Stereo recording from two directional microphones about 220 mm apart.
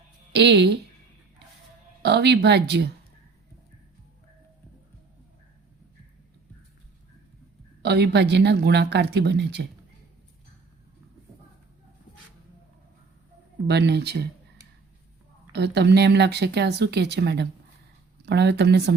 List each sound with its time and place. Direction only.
0.3 s speech: 50° right (ahead or behind)
2.0 s speech: 50° right (ahead or behind)
7.8 s speech: 50° right (ahead or behind)
13.7 s speech: 50° right (ahead or behind)
15.5 s speech: 50° right (ahead or behind)